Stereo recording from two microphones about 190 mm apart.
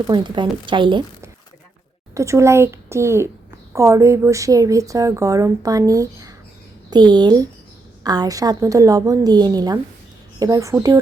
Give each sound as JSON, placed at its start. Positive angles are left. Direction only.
{"t": 0.1, "sound": "a woman's voice", "side_deg": -25}
{"t": 2.1, "sound": "a woman's voice", "side_deg": -15}